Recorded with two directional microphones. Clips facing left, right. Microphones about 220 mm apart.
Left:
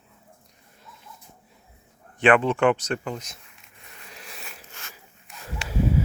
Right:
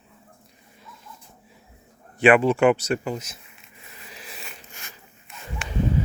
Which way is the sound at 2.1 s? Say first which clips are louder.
Right 3 dB; 10° right (ahead or behind).